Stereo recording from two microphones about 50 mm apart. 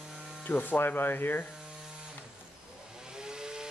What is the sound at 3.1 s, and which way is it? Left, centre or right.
Vehicle, centre.